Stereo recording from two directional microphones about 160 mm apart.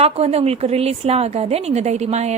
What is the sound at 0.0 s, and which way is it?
A woman's voice, 40° right (ahead or behind).